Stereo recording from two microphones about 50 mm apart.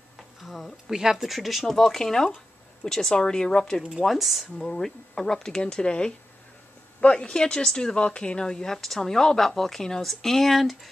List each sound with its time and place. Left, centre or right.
0.4 s speech: centre
4.0 s speech: centre
4.6 s speech: centre